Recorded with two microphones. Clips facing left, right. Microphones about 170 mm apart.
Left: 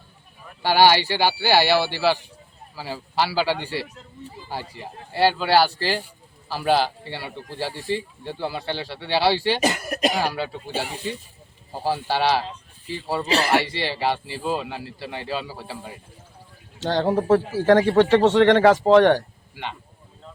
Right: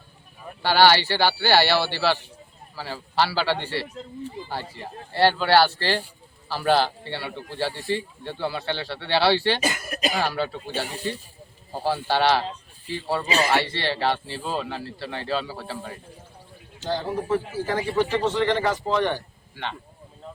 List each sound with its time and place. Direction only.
0.6 s a man's voice: 15° left (ahead or behind)
16.8 s speech: 70° left (ahead or behind)